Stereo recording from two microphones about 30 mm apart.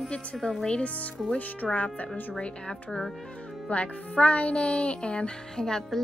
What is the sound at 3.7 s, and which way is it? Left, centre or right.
Music, left.